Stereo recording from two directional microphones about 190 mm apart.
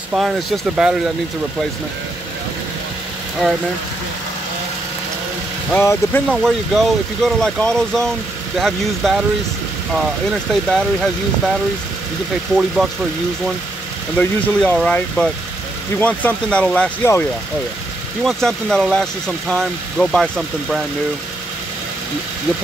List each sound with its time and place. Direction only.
0.1 s speech: 5° right (ahead or behind)
5.7 s speech: 10° left (ahead or behind)
6.3 s speech: centre (ahead or behind)
12.5 s speech: 5° right (ahead or behind)
14.1 s speech: 5° left (ahead or behind)
18.2 s speech: centre (ahead or behind)